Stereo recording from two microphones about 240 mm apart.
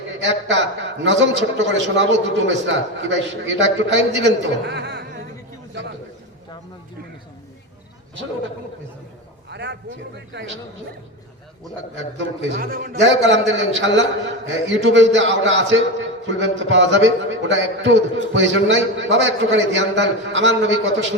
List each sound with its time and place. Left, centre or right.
0.2 s a man's voice: right
9.5 s a man's voice: right
12.1 s a man's voice: right